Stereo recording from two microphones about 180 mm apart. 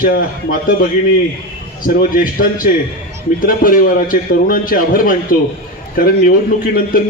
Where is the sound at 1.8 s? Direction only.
55° left (ahead or behind).